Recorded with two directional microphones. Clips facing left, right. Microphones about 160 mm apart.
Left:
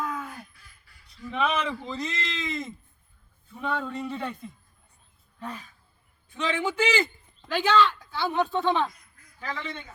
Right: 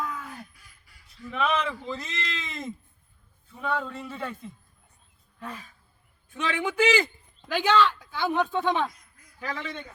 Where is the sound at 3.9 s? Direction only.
5° right (ahead or behind).